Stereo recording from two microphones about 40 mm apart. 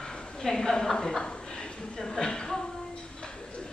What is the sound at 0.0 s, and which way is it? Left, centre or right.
A woman's voice, centre.